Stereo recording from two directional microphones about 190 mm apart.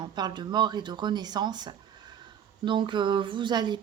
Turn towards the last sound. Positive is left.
turn(degrees=-20)  # may be behind; listen again after turning